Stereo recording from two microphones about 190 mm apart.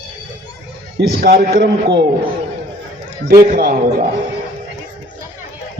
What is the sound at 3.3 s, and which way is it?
Speech, 45° right (ahead or behind).